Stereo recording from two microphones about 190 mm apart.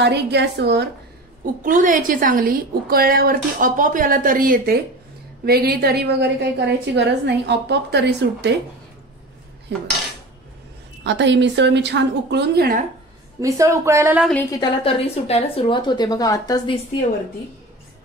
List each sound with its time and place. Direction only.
0.0 s a woman's voice: 65° right (ahead or behind)
1.6 s a woman's voice: 45° right (ahead or behind); by 8.5 s 65° right (ahead or behind)
9.7 s cutlery: 70° right (ahead or behind)
11.1 s a woman's voice: 65° right (ahead or behind)
13.4 s speech: 15° right (ahead or behind)
14.6 s speech: 30° left (ahead or behind)